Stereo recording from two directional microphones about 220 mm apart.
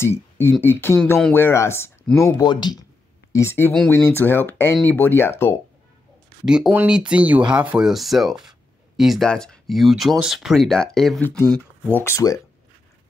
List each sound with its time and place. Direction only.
0.0 s speech: 10° left (ahead or behind)
2.3 s speech: 20° left (ahead or behind)
6.4 s speech: 5° right (ahead or behind); by 12.4 s 15° left (ahead or behind)